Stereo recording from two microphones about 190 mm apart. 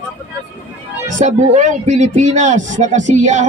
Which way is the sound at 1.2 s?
35° right (ahead or behind).